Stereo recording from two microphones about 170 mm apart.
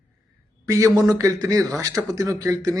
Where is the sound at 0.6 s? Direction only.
20° right (ahead or behind).